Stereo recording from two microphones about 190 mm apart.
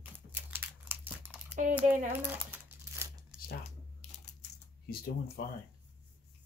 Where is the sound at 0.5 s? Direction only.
10° right (ahead or behind).